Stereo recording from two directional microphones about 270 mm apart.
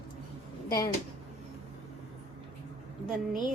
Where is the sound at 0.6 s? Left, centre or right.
Centre.